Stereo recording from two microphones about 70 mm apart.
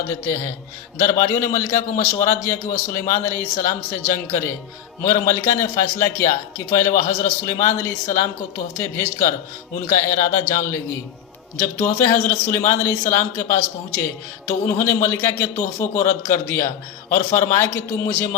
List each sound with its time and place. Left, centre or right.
0.1 s a man's voice: left
11.5 s a man's voice: left